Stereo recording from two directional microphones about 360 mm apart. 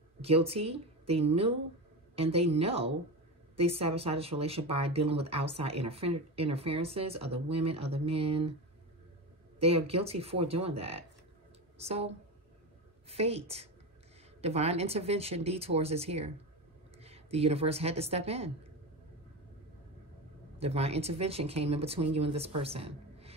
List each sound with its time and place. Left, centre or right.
0.2 s speech: centre
9.6 s speech: centre
13.1 s a woman's voice: centre
20.5 s speech: centre